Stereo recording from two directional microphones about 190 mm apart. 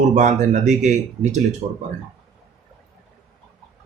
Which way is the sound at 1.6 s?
20° right (ahead or behind).